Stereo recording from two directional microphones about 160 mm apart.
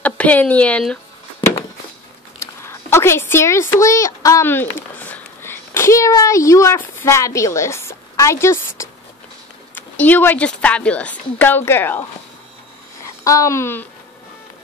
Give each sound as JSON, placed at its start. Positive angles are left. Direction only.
{"t": 0.0, "sound": "speech", "side_deg": 10}
{"t": 2.6, "sound": "a woman's voice", "side_deg": 15}
{"t": 13.2, "sound": "speech", "side_deg": 20}